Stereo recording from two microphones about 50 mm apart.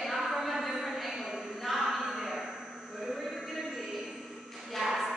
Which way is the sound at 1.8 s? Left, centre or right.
Centre.